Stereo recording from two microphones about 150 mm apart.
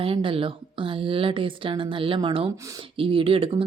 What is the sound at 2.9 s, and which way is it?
Speech, 35° right (ahead or behind).